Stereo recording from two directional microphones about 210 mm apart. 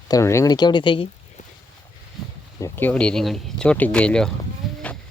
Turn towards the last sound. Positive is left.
turn(degrees=5)  # may be behind; listen again after turning